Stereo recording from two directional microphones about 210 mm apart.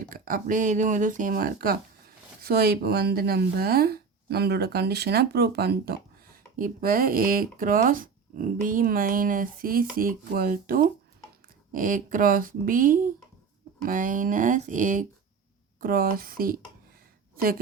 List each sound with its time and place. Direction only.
0.1 s a woman's voice: 40° right (ahead or behind)